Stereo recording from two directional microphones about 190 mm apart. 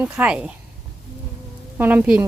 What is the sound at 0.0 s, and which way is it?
Speech, 10° right (ahead or behind).